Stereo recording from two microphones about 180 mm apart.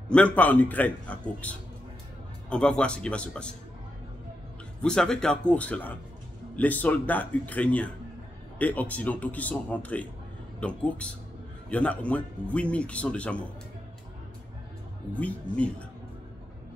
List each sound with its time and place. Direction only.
0.1 s a man's voice: 10° left (ahead or behind)
4.8 s a man's voice: 5° left (ahead or behind)
15.1 s a man's voice: 5° left (ahead or behind)